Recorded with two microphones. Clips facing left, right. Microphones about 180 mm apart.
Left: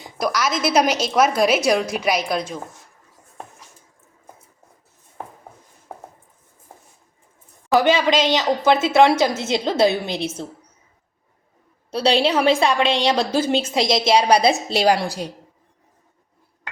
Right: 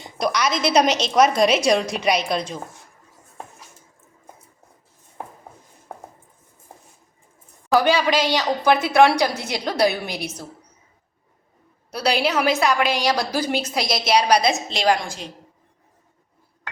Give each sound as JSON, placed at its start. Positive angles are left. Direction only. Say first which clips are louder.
{"t": 0.0, "sound": "a woman's voice", "louder": "even", "side_deg": 5}
{"t": 7.7, "sound": "a woman's voice", "louder": "left 1 dB", "side_deg": 20}
{"t": 11.9, "sound": "a woman's voice", "louder": "left 3 dB", "side_deg": 30}